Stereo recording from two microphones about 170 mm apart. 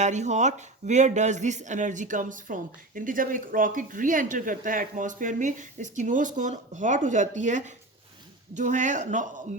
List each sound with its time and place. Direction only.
0.0 s speech: 45° right (ahead or behind)